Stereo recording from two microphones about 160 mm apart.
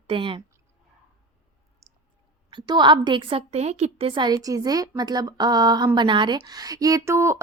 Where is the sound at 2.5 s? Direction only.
30° right (ahead or behind).